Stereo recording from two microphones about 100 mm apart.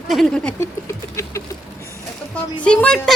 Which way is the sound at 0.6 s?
30° left (ahead or behind).